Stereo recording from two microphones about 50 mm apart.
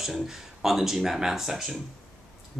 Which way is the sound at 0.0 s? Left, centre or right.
Centre.